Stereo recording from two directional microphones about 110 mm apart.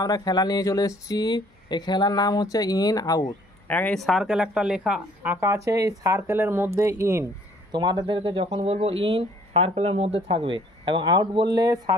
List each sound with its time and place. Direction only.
0.0 s speech: 35° left (ahead or behind)
3.6 s speech: 15° left (ahead or behind); by 7.2 s 25° right (ahead or behind)
7.7 s speech: 40° right (ahead or behind)